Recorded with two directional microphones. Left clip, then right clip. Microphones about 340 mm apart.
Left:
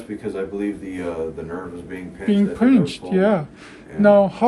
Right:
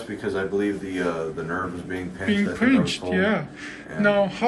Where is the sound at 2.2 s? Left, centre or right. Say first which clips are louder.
Left 4 dB; centre.